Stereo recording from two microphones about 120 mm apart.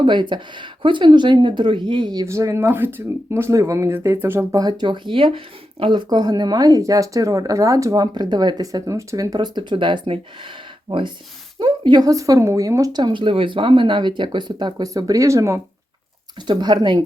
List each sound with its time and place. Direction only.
0.0 s speech: 40° right (ahead or behind)
2.2 s speech: 25° right (ahead or behind)
4.6 s speech: 40° right (ahead or behind)
6.1 s speech: 35° right (ahead or behind)
13.0 s speech: 40° right (ahead or behind); by 15.6 s 25° right (ahead or behind)
16.5 s speech: 35° right (ahead or behind)